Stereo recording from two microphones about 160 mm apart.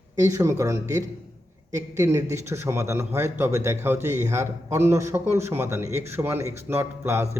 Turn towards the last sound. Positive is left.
turn(degrees=-15)  # may be behind; listen again after turning